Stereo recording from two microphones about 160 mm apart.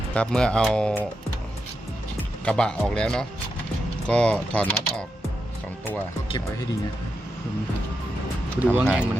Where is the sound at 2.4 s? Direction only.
5° left (ahead or behind).